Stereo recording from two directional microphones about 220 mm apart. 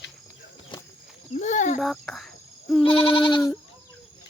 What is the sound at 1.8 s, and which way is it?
Cricket, centre (ahead or behind).